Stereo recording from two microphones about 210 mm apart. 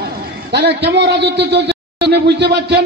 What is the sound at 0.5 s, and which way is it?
A man's voice, 50° right (ahead or behind).